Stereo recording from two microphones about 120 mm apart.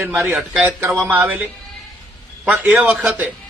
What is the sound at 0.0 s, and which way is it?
A man's voice, 15° right (ahead or behind).